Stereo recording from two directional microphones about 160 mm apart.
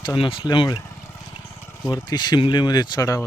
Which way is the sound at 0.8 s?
15° left (ahead or behind).